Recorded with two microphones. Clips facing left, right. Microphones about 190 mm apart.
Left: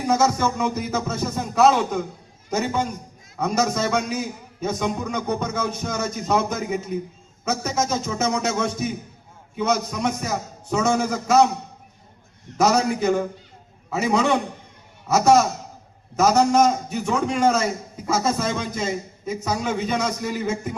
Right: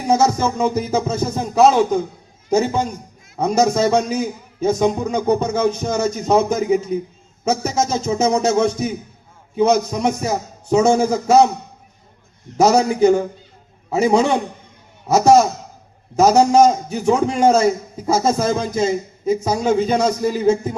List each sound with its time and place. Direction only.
0.1 s a man's voice: 30° right (ahead or behind)
12.5 s a man's voice: 30° right (ahead or behind)